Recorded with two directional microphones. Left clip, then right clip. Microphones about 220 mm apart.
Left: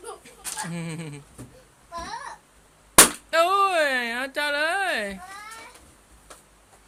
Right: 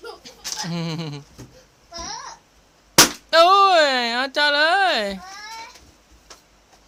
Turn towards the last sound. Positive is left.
turn(degrees=-25)  # may be behind; listen again after turning